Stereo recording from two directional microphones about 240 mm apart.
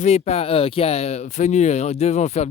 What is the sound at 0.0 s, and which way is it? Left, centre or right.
Speech, left.